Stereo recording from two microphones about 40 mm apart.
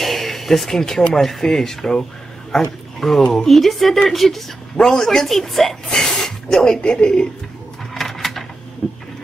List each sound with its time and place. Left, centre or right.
0.0 s a sound: centre
1.0 s speech: centre
3.0 s speech: centre
6.8 s speech: left
7.9 s a sound: centre
8.8 s printer: left